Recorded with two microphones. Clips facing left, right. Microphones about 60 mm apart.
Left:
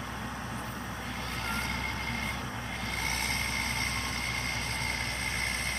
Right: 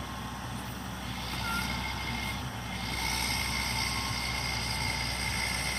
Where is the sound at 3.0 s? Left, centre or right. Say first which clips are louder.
Left 1 dB; left.